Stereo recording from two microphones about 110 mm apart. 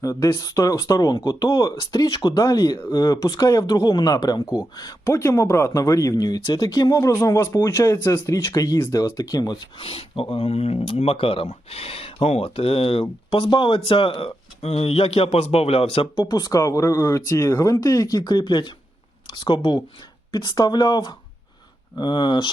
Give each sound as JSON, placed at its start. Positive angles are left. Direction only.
{"t": 0.0, "sound": "speech", "side_deg": 30}
{"t": 9.8, "sound": "speech", "side_deg": 60}
{"t": 16.1, "sound": "speech", "side_deg": 35}